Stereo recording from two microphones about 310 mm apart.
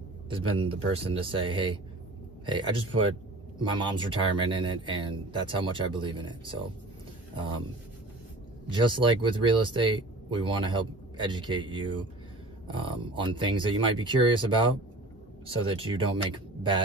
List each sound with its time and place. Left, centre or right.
0.3 s speech: centre
8.6 s speech: centre
15.7 s speech: centre